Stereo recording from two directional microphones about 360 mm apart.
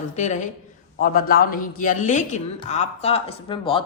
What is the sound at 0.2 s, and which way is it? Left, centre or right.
A woman's voice, centre.